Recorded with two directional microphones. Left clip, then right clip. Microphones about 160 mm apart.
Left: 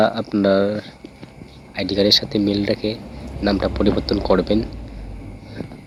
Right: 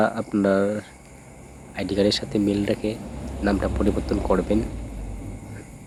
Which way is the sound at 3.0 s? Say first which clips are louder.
Left 3 dB; centre (ahead or behind).